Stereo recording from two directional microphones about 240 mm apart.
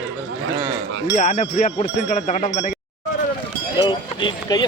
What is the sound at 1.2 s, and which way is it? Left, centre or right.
Speech, left.